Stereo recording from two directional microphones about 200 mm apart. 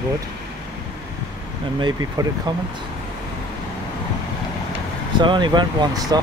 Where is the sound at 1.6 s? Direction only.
25° right (ahead or behind).